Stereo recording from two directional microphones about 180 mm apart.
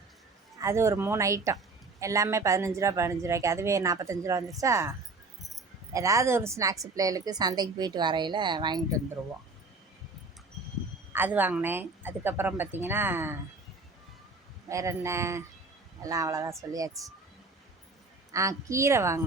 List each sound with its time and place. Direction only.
0.6 s a woman's voice: 15° right (ahead or behind)
11.1 s speech: 10° right (ahead or behind)
14.7 s speech: 15° right (ahead or behind)
18.3 s speech: 15° right (ahead or behind)